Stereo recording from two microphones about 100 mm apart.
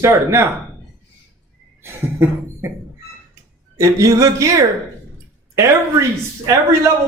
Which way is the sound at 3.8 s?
30° right (ahead or behind).